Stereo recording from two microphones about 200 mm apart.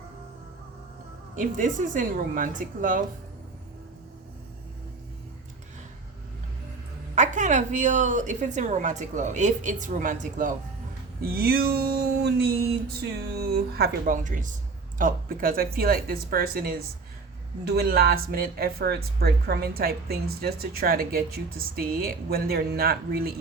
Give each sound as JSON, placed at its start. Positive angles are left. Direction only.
{"t": 1.4, "sound": "a woman's voice", "side_deg": -40}
{"t": 7.2, "sound": "a woman's voice", "side_deg": -40}